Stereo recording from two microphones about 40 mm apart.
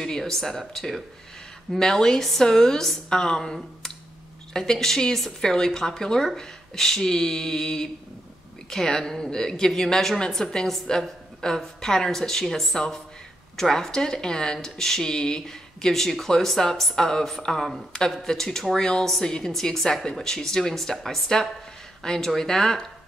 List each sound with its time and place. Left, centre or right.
0.0 s speech: centre
12.7 s speech: centre